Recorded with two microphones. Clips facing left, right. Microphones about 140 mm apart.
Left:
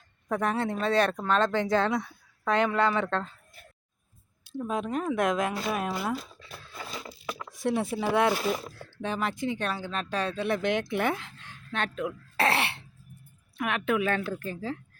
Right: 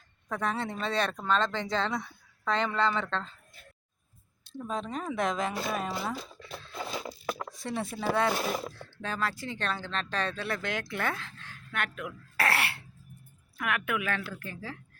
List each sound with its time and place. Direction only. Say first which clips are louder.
0.3 s speech: left 4 dB; 15° left (ahead or behind)
4.4 s speech: left 4 dB; 10° left (ahead or behind)
7.1 s a sound: right 3 dB; 45° right (ahead or behind)
7.5 s speech: left 7 dB; 10° left (ahead or behind); by 14.8 s 30° left (ahead or behind)